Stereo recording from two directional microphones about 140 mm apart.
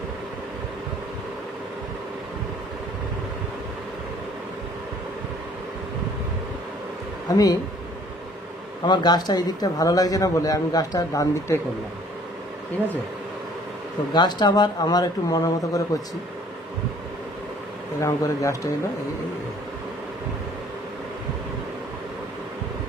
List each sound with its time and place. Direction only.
7.2 s speech: 25° left (ahead or behind)
8.8 s a man's voice: 30° left (ahead or behind)
14.1 s a man's voice: 30° left (ahead or behind)
18.0 s a man's voice: 20° left (ahead or behind)